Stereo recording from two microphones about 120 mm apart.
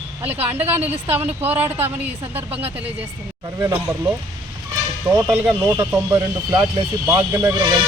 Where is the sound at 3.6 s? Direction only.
20° right (ahead or behind).